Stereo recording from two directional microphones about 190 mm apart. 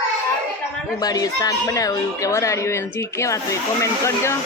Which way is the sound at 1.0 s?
20° left (ahead or behind).